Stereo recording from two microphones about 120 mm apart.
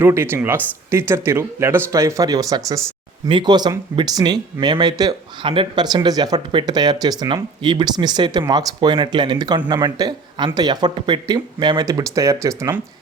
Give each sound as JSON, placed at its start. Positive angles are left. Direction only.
{"t": 0.0, "sound": "speech", "side_deg": -20}
{"t": 3.2, "sound": "speech", "side_deg": -40}